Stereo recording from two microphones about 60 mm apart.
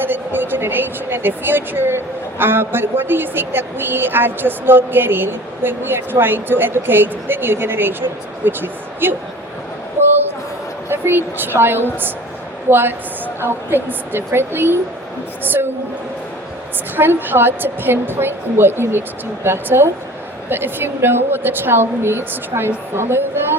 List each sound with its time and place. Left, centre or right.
0.0 s a woman's voice: right
10.8 s a woman's voice: right
17.0 s a woman's voice: right